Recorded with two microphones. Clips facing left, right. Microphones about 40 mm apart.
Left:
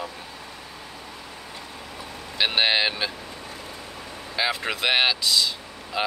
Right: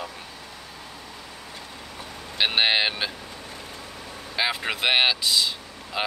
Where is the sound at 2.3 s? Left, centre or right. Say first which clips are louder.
Even; centre.